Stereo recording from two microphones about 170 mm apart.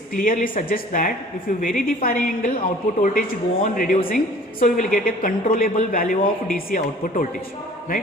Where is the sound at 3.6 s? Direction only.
55° left (ahead or behind).